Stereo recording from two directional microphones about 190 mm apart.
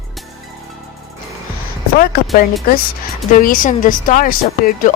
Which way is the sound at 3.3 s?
45° left (ahead or behind).